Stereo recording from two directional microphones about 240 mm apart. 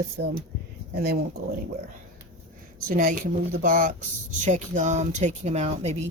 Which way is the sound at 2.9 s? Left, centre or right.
Right.